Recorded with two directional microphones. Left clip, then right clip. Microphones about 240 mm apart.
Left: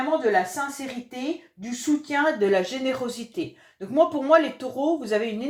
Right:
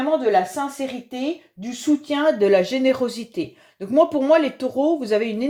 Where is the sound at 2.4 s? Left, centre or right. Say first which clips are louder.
Right 6 dB; right.